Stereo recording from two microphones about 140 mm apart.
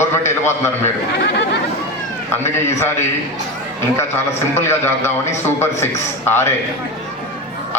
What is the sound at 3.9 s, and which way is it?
A man's voice, 15° left (ahead or behind).